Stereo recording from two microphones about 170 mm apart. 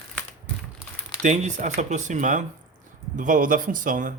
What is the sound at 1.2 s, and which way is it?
Speech, 45° right (ahead or behind).